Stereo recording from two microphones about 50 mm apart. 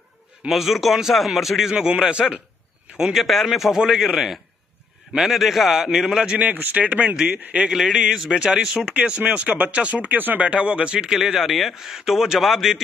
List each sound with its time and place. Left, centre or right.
0.5 s speech: centre
1.7 s speech: centre
3.2 s speech: centre
6.2 s speech: right
7.6 s speech: centre
11.1 s speech: centre